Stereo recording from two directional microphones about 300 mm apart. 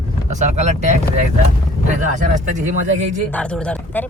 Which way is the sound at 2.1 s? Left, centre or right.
Right.